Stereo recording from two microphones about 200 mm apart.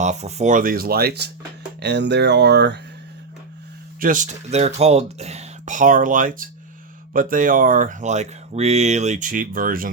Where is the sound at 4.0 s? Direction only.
40° right (ahead or behind).